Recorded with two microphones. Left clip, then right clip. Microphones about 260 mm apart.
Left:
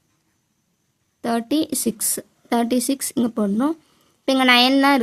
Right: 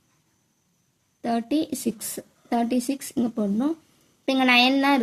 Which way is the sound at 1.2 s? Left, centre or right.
Left.